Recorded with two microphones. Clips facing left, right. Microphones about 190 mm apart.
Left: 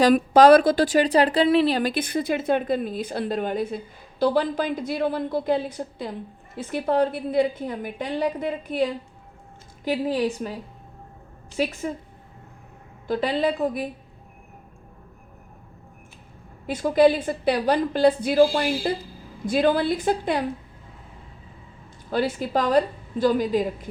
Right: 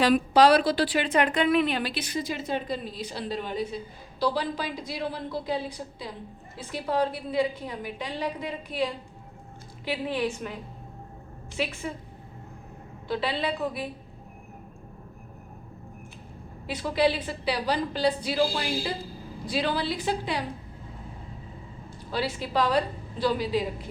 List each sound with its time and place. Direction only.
0.0 s a woman's voice: 45° left (ahead or behind)
13.1 s a woman's voice: 45° left (ahead or behind)
16.6 s a woman's voice: 50° left (ahead or behind)
22.1 s a woman's voice: 50° left (ahead or behind)